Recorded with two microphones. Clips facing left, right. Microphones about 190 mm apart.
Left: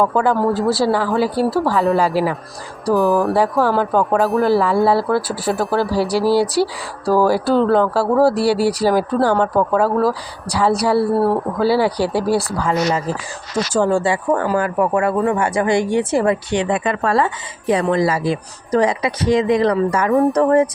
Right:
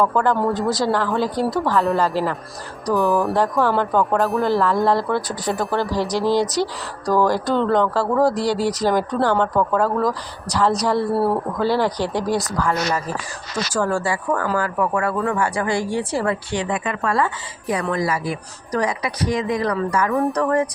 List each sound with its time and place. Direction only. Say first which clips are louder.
0.0 s speech: left 2 dB; 15° left (ahead or behind)
0.3 s speech: left 4 dB; centre (ahead or behind)
2.8 s speech: left 3 dB; centre (ahead or behind)
13.7 s speech: left 5 dB; 25° left (ahead or behind)